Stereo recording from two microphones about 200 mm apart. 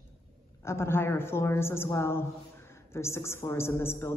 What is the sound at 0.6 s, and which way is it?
A woman's voice, 15° left (ahead or behind).